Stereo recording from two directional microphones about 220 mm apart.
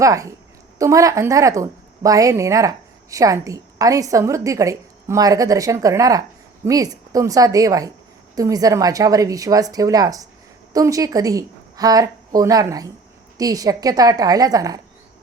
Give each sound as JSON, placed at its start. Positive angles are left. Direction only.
{"t": 0.0, "sound": "a woman's voice", "side_deg": -15}